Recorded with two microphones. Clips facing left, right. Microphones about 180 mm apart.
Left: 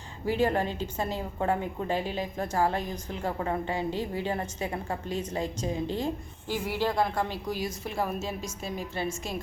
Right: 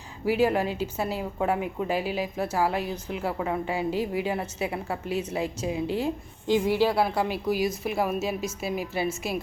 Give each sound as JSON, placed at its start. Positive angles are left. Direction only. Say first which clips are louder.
{"t": 0.3, "sound": "a woman's voice", "louder": "right 3 dB", "side_deg": -10}